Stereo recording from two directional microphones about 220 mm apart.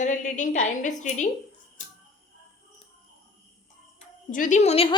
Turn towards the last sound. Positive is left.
turn(degrees=30)  # may be behind; listen again after turning